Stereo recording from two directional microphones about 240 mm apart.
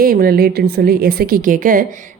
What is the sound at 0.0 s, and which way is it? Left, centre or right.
A woman's voice, right.